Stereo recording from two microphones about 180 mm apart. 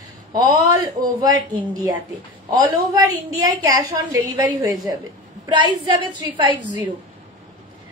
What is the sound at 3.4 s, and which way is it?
A woman's voice, 20° right (ahead or behind).